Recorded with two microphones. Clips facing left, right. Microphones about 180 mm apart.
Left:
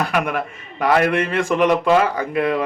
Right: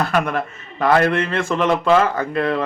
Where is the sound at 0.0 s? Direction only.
10° left (ahead or behind).